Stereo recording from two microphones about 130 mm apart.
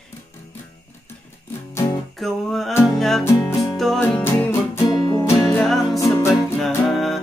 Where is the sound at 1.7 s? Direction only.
20° left (ahead or behind).